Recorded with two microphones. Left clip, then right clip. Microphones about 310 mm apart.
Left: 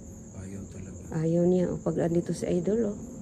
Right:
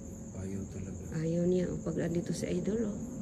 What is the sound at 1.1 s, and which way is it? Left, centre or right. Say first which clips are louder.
Speech: left 6 dB; centre.